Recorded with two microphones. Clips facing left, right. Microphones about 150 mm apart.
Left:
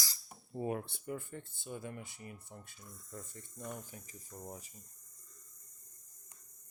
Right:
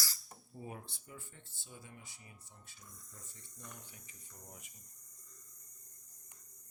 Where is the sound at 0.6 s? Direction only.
65° left (ahead or behind); by 4.6 s 45° left (ahead or behind).